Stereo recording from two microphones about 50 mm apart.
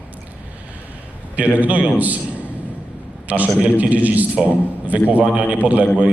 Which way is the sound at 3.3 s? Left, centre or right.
Right.